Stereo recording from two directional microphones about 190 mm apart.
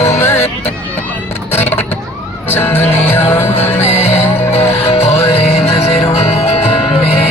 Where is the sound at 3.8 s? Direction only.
35° left (ahead or behind).